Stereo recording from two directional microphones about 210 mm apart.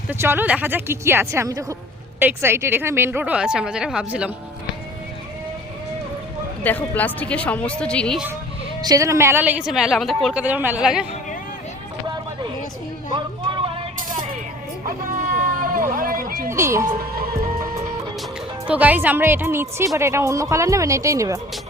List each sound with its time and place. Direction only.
0.1 s a woman's voice: 10° right (ahead or behind)
6.6 s a woman's voice: 5° left (ahead or behind)
8.8 s a woman's voice: 15° right (ahead or behind)
13.1 s a sound: 25° right (ahead or behind)
15.6 s a sound: 40° right (ahead or behind)
16.5 s a woman's voice: 15° right (ahead or behind)
18.7 s a woman's voice: 5° right (ahead or behind)